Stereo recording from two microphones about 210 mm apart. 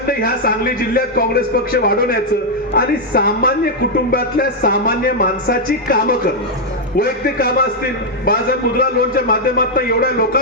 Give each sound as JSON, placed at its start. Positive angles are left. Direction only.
{"t": 0.1, "sound": "a man's voice", "side_deg": 45}